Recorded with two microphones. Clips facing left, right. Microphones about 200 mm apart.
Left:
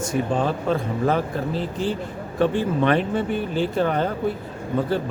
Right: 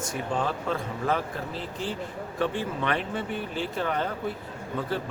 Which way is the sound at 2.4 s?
30° left (ahead or behind).